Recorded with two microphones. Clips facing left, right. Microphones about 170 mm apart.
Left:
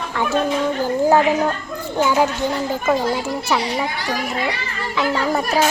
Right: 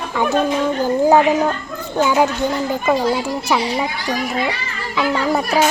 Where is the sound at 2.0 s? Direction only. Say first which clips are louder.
Right 2 dB; 15° right (ahead or behind).